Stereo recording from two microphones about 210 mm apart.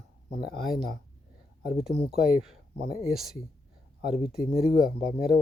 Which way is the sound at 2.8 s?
45° left (ahead or behind).